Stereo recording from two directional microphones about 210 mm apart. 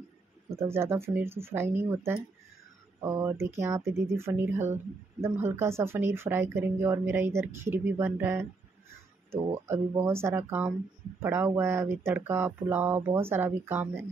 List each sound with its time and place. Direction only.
0.5 s speech: 10° right (ahead or behind)
9.5 s speech: 10° right (ahead or behind)